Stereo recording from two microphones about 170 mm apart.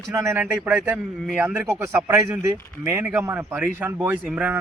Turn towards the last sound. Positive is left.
turn(degrees=-10)  # may be behind; listen again after turning